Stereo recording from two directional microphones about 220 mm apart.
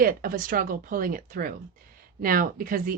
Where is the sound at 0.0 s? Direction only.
40° right (ahead or behind).